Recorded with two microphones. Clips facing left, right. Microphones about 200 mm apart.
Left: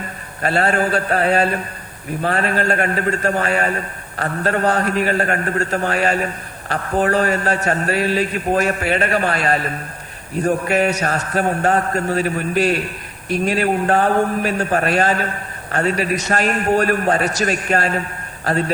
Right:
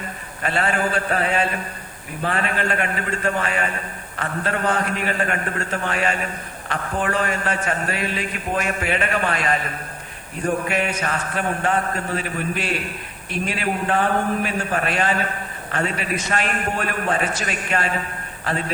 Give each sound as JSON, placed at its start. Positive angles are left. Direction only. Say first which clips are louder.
{"t": 0.4, "sound": "a man's voice", "louder": "left 4 dB", "side_deg": 40}